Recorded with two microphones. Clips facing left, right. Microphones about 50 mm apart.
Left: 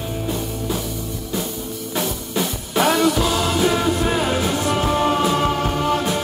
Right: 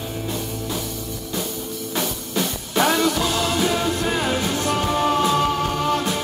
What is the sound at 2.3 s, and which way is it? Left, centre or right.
Music, centre.